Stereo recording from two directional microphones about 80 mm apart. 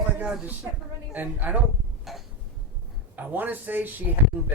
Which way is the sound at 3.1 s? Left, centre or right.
Right.